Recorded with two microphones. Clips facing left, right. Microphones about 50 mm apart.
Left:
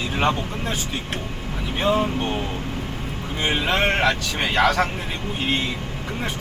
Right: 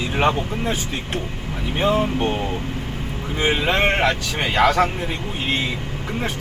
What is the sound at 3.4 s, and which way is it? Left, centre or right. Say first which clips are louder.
Speech: right 2 dB; centre.